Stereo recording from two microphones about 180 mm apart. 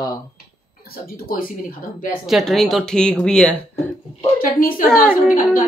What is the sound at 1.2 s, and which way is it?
Speech, 50° left (ahead or behind).